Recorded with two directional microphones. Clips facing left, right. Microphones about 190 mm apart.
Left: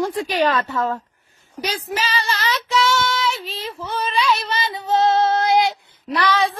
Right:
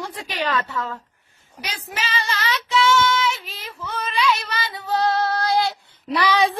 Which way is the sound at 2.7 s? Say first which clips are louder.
Right 2 dB; 35° left (ahead or behind).